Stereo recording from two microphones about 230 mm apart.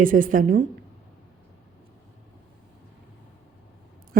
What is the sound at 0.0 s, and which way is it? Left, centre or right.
Speech, right.